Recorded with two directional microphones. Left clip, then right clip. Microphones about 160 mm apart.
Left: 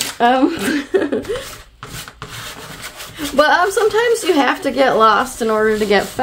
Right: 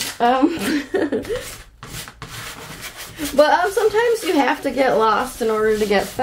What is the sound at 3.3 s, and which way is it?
A woman's voice, 25° left (ahead or behind).